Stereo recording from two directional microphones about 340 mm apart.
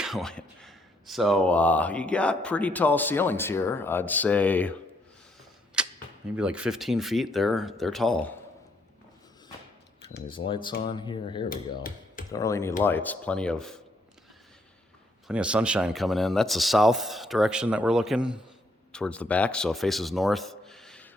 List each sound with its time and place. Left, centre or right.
0.0 s speech: centre
5.8 s cap gun: centre
6.3 s speech: centre
10.2 s speech: centre
11.4 s hammer: left
12.3 s speech: centre
15.3 s speech: centre